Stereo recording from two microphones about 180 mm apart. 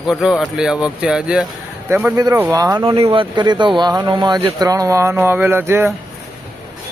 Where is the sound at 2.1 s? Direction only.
20° right (ahead or behind).